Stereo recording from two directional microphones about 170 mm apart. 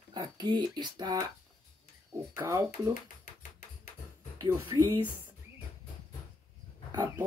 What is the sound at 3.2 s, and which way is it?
Music, 50° left (ahead or behind).